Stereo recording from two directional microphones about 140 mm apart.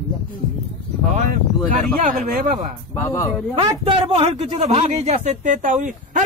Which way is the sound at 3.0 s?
20° left (ahead or behind).